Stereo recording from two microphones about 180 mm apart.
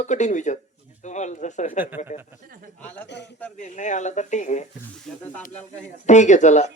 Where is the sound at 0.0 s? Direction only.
40° left (ahead or behind).